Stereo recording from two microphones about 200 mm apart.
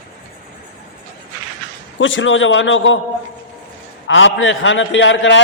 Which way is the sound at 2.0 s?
75° left (ahead or behind).